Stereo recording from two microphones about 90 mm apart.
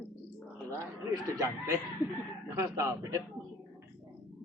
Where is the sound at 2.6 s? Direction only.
35° right (ahead or behind).